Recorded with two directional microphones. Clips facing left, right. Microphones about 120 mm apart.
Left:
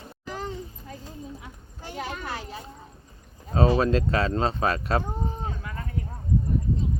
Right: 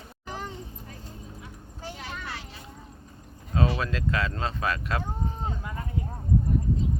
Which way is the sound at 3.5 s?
35° left (ahead or behind).